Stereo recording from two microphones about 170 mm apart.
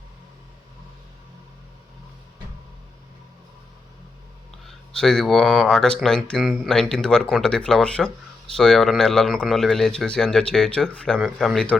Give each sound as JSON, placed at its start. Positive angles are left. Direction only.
{"t": 4.6, "sound": "speech", "side_deg": 5}